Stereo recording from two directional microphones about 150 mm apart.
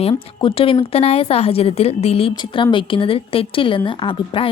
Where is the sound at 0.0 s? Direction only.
35° left (ahead or behind).